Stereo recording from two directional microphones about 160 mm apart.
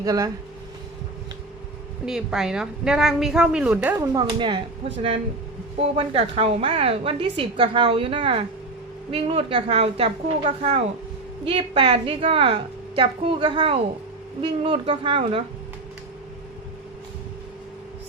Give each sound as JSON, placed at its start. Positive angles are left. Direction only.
{"t": 0.0, "sound": "speech", "side_deg": -20}
{"t": 2.0, "sound": "a woman's voice", "side_deg": -5}
{"t": 4.0, "sound": "speech", "side_deg": -25}
{"t": 6.0, "sound": "a woman's voice", "side_deg": -35}